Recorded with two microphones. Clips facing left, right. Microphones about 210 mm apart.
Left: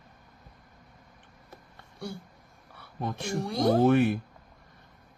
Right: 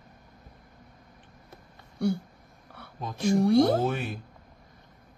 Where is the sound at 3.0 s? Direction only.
60° left (ahead or behind).